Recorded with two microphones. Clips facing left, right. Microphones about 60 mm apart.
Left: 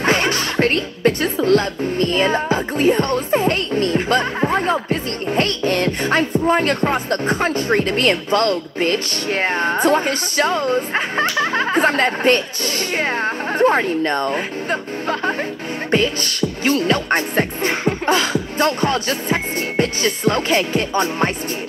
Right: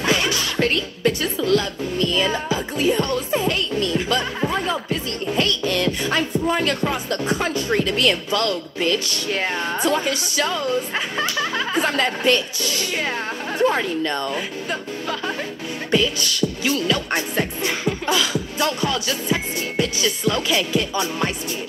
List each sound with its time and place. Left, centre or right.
0.0 s speech: left
15.9 s music: left